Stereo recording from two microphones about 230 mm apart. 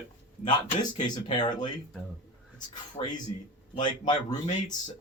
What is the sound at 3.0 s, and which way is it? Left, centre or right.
Speech, left.